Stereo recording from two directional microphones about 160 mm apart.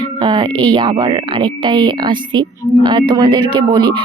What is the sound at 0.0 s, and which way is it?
Speech, 30° right (ahead or behind).